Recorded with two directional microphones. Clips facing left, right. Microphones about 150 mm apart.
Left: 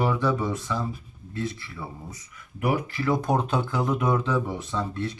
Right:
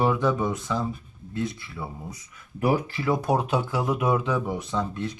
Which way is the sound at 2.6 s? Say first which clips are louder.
Right 2 dB; 30° right (ahead or behind).